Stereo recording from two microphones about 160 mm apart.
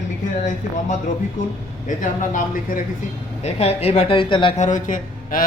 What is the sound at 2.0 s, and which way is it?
Speech, 55° left (ahead or behind).